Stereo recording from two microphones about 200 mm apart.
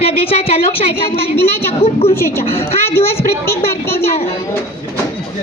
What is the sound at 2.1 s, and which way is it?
Speech, 10° left (ahead or behind).